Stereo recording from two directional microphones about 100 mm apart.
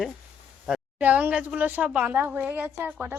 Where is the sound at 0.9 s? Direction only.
15° right (ahead or behind).